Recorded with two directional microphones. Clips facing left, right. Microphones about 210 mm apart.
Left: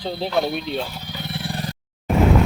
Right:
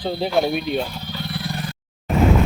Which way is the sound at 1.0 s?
15° left (ahead or behind).